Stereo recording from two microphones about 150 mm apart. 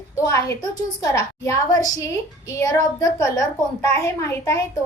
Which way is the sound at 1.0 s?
20° left (ahead or behind).